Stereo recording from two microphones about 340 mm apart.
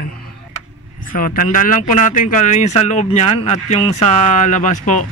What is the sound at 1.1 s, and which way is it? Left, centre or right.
Speech, left.